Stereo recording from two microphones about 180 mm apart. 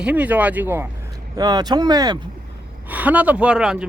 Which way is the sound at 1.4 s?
25° right (ahead or behind).